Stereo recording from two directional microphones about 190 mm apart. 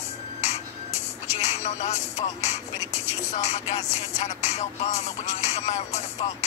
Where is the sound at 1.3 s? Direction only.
35° left (ahead or behind).